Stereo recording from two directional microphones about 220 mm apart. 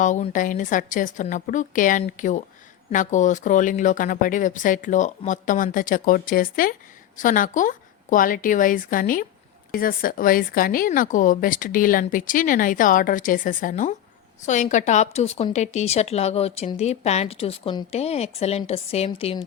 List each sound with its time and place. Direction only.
0.0 s a woman's voice: 35° left (ahead or behind)